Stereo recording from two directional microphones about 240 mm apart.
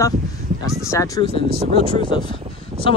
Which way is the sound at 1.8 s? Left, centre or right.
Right.